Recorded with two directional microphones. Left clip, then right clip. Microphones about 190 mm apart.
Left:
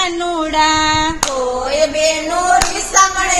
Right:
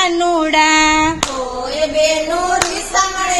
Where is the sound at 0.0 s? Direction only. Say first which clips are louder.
Right 3 dB; 30° right (ahead or behind).